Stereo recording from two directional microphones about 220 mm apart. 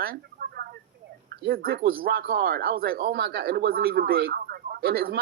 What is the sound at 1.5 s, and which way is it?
Speech, 45° right (ahead or behind).